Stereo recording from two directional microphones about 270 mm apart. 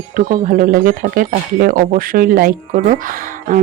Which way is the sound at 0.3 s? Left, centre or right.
Right.